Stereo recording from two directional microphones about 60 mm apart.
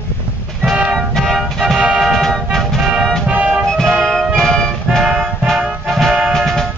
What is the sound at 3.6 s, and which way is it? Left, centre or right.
Music, centre.